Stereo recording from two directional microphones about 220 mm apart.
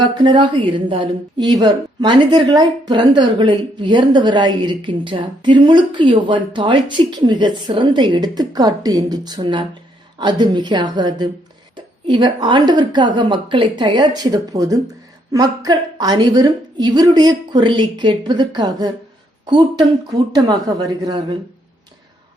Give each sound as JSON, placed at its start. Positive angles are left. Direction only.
{"t": 0.0, "sound": "a woman's voice", "side_deg": -20}